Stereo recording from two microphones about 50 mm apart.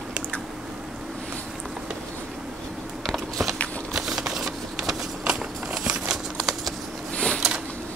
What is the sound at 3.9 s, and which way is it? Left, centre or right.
Shuffling cards, centre.